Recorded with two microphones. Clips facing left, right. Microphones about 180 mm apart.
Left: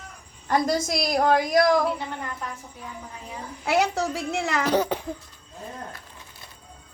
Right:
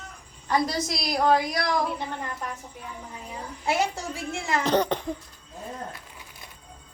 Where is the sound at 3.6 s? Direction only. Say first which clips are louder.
Left 4 dB; 65° left (ahead or behind).